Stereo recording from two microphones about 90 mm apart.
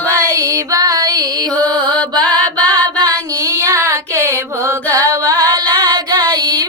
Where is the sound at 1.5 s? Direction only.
15° left (ahead or behind).